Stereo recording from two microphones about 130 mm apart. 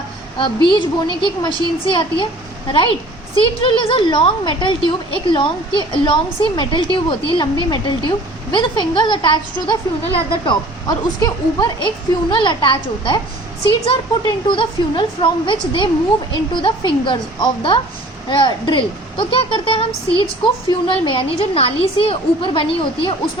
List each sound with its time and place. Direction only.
0.3 s a woman's voice: 40° left (ahead or behind)
3.3 s a woman's voice: 40° left (ahead or behind)